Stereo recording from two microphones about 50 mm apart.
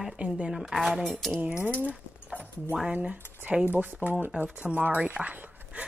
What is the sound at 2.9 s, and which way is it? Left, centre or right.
A woman's voice, right.